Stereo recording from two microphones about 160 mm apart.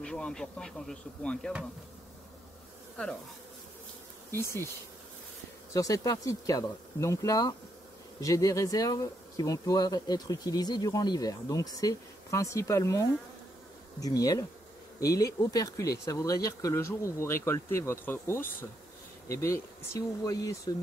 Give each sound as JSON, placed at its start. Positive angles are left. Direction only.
{"t": 0.0, "sound": "speech", "side_deg": 5}
{"t": 4.3, "sound": "speech", "side_deg": 15}
{"t": 5.7, "sound": "speech", "side_deg": 20}